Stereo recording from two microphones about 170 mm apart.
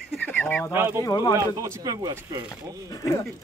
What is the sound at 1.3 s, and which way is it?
Speech, 20° right (ahead or behind).